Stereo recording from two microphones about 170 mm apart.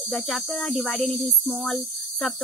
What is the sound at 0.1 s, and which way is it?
Speech, 5° left (ahead or behind).